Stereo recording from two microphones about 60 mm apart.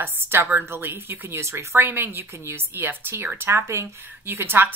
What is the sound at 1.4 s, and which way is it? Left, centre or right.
A woman's voice, right.